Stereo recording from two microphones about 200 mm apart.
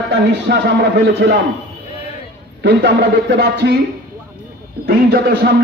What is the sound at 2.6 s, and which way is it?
Speech, 60° right (ahead or behind).